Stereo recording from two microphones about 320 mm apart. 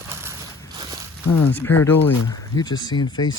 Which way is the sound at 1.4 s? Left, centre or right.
Centre.